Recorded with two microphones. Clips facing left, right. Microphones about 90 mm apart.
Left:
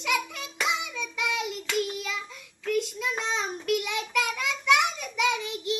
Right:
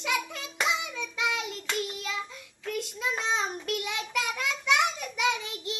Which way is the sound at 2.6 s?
25° right (ahead or behind).